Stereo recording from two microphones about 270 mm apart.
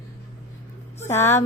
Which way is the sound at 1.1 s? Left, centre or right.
Centre.